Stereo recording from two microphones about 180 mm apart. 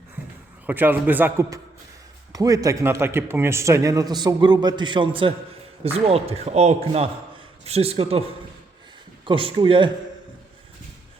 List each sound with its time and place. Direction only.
0.7 s a man's voice: 10° right (ahead or behind); by 8.2 s 30° right (ahead or behind)
9.2 s a man's voice: 25° right (ahead or behind)